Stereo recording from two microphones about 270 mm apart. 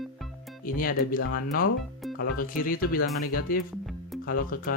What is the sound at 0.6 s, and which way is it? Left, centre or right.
Speech, left.